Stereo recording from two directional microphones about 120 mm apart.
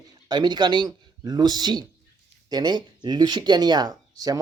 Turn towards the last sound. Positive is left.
turn(degrees=-30)  # may be behind; listen again after turning